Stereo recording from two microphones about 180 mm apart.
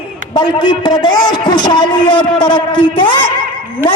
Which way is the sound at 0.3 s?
25° left (ahead or behind).